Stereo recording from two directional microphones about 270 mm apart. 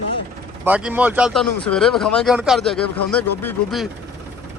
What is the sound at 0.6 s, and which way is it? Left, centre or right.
Speech, centre.